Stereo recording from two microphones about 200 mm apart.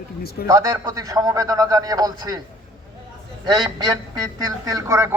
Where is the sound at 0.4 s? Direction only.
15° right (ahead or behind).